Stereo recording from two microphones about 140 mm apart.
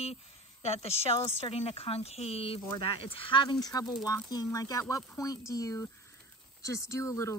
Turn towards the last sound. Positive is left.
turn(degrees=20)  # may be behind; listen again after turning